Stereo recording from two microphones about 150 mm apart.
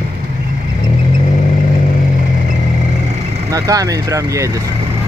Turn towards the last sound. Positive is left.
turn(degrees=-20)  # may be behind; listen again after turning